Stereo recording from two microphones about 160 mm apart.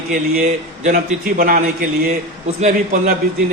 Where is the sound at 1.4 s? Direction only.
65° right (ahead or behind).